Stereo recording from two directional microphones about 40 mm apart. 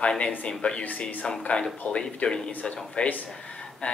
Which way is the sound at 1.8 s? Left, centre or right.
Left.